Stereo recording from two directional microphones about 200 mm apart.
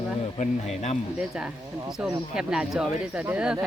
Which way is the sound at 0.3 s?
35° left (ahead or behind).